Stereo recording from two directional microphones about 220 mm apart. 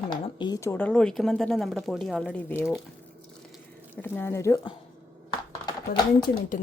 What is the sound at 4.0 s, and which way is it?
Speech, 10° left (ahead or behind).